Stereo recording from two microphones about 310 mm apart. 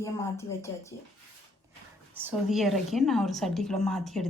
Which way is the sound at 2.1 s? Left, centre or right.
Centre.